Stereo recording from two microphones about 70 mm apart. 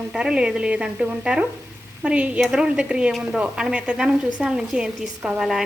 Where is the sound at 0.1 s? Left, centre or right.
Centre.